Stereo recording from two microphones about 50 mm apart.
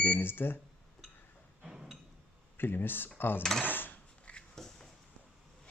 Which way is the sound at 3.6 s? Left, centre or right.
Left.